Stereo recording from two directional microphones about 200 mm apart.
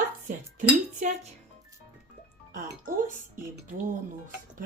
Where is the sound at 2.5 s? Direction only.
40° right (ahead or behind).